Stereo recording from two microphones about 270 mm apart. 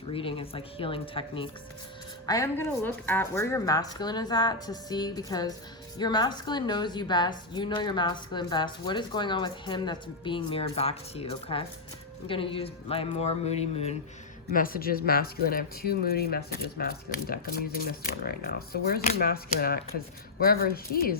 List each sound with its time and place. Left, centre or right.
0.1 s a woman's voice: centre